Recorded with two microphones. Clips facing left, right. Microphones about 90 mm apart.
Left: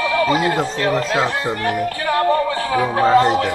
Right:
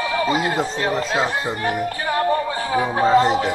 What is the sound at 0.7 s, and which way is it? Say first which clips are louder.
Speech: left 3 dB; 20° right (ahead or behind).